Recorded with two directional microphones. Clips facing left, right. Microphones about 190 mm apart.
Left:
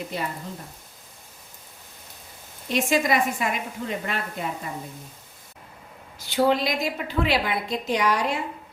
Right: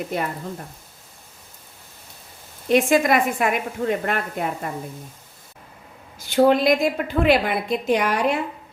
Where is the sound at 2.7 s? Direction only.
55° right (ahead or behind).